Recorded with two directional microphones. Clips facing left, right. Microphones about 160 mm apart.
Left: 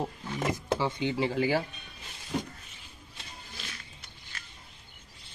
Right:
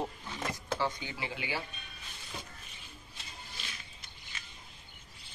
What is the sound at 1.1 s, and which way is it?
Speech, 35° left (ahead or behind).